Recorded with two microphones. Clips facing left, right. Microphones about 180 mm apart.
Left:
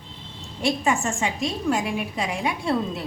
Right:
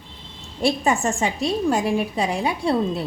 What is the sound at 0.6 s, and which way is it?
A woman's voice, 35° right (ahead or behind).